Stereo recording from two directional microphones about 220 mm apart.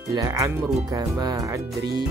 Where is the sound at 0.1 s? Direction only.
15° right (ahead or behind).